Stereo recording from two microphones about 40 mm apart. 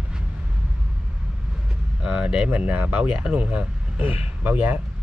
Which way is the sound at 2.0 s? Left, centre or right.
Right.